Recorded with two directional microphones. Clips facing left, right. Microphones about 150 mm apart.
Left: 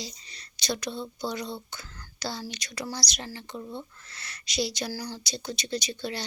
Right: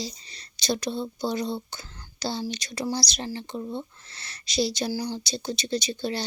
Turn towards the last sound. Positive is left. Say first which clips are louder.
# right 4 dB
turn(degrees=-30)  # may be behind; listen again after turning